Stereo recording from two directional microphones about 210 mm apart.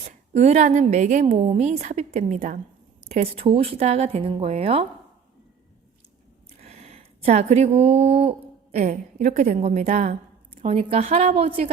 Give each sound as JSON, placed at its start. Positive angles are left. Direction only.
{"t": 0.3, "sound": "a woman's voice", "side_deg": -35}
{"t": 6.6, "sound": "a woman's voice", "side_deg": -30}